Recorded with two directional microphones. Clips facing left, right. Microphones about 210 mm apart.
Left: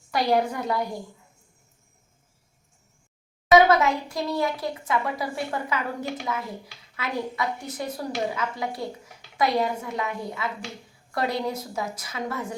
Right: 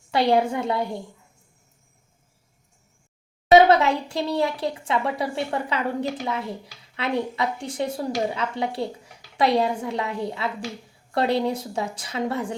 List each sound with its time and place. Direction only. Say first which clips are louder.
0.1 s a woman's voice: right 3 dB; 25° right (ahead or behind)
3.5 s a woman's voice: right 2 dB; 30° right (ahead or behind)